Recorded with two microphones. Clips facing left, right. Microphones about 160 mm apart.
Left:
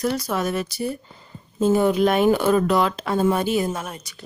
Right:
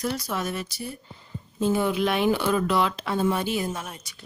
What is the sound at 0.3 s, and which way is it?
Speech, 55° left (ahead or behind).